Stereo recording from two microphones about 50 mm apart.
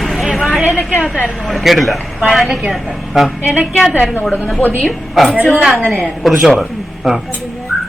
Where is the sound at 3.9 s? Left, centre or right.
Left.